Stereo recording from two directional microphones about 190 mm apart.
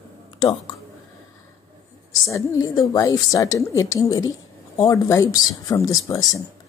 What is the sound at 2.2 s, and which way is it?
A woman's voice, 15° left (ahead or behind).